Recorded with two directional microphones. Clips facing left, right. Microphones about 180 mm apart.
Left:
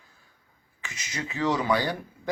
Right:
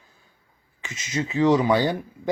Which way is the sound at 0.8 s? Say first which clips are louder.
Right 8 dB; 20° right (ahead or behind).